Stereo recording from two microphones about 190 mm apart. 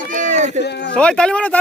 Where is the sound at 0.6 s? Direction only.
65° left (ahead or behind).